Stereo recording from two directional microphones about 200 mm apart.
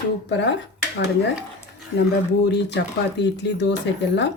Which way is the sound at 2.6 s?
60° left (ahead or behind).